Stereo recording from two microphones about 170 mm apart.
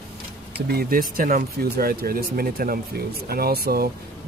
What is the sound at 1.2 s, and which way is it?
Speech, 55° right (ahead or behind).